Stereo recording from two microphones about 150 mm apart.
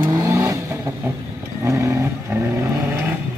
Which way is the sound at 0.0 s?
20° right (ahead or behind).